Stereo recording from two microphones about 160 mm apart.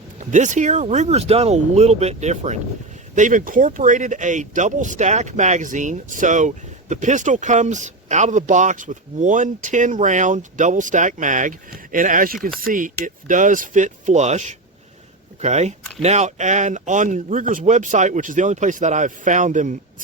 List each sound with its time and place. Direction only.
0.2 s speech: 50° right (ahead or behind)